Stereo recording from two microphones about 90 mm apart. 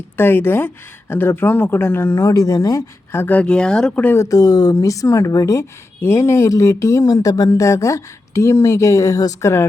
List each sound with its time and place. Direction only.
0.2 s speech: 25° left (ahead or behind)
2.3 s speech: 40° left (ahead or behind)
3.3 s speech: 10° left (ahead or behind)
4.0 s speech: 30° left (ahead or behind)